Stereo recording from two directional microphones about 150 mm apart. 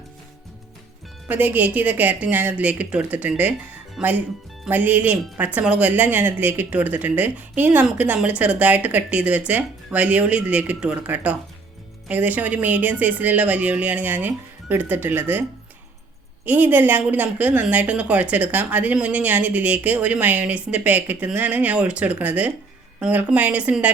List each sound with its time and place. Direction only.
1.3 s a woman's voice: 10° right (ahead or behind)
16.5 s a woman's voice: 15° right (ahead or behind)